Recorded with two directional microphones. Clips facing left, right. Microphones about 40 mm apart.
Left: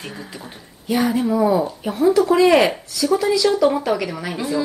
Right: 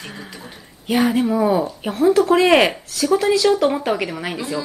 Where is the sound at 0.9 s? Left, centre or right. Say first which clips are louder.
Right 2 dB; right.